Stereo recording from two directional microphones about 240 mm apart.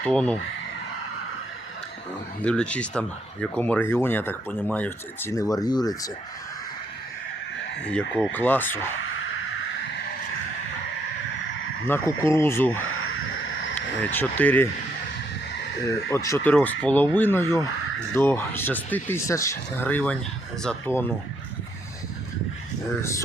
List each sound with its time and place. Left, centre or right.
0.0 s speech: centre
2.4 s speech: centre
7.9 s speech: centre
11.9 s speech: centre
12.8 s a sound: left
13.7 s speech: centre
16.0 s speech: centre
23.0 s speech: centre